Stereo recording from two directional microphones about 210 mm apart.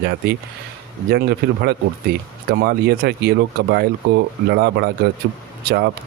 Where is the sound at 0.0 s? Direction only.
50° right (ahead or behind).